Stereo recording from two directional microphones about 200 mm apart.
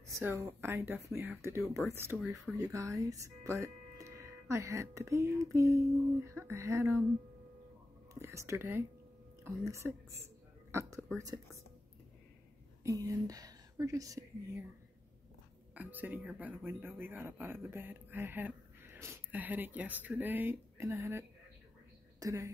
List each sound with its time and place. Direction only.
0.0 s speech: 15° right (ahead or behind)
2.1 s speech: 5° right (ahead or behind)
2.5 s speech: 15° right (ahead or behind)
8.1 s speech: 15° right (ahead or behind)
10.7 s a sound: 15° right (ahead or behind)
12.8 s speech: 15° right (ahead or behind)
15.7 s a woman's voice: 10° right (ahead or behind)